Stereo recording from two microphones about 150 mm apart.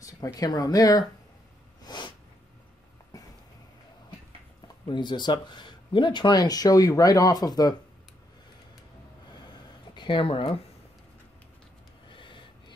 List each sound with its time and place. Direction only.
0.0 s speech: 20° left (ahead or behind)
1.8 s snort: 30° left (ahead or behind)
4.8 s speech: 30° left (ahead or behind)
9.9 s speech: 35° left (ahead or behind)
12.2 s gasp: 35° left (ahead or behind)